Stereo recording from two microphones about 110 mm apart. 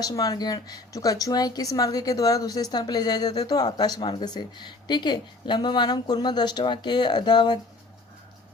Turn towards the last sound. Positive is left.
turn(degrees=45)  # may be behind; listen again after turning